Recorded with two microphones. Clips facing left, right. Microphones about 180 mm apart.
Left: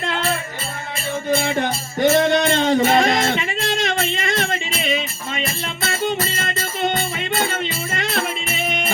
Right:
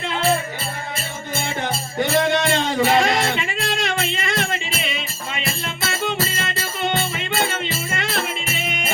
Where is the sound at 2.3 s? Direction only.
40° left (ahead or behind).